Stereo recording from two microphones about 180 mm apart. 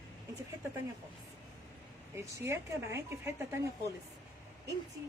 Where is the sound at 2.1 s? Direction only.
15° right (ahead or behind).